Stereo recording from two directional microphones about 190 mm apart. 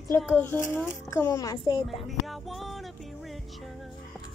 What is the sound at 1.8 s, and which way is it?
Speech, centre (ahead or behind).